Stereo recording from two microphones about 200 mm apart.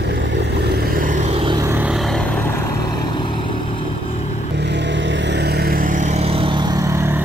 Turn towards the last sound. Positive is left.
turn(degrees=-15)  # may be behind; listen again after turning